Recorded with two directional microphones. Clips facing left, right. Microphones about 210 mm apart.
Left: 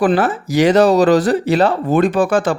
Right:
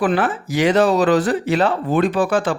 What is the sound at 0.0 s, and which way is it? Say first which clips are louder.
Speech: left 4 dB; 40° left (ahead or behind).